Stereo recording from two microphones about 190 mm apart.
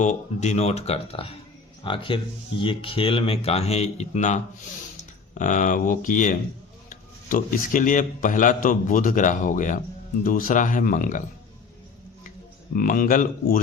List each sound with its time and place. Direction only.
0.0 s a man's voice: 40° left (ahead or behind)
12.7 s a man's voice: 45° left (ahead or behind)